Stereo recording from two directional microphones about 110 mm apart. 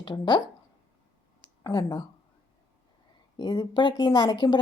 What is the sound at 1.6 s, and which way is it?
Speech, 35° left (ahead or behind).